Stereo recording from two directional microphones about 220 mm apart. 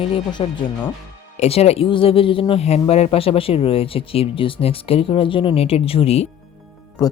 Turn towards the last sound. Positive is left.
turn(degrees=15)  # may be behind; listen again after turning